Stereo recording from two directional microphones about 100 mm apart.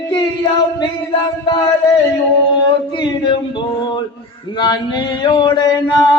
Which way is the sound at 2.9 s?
50° left (ahead or behind).